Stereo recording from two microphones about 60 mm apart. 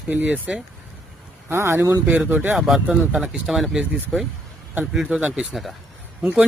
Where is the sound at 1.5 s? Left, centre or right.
Right.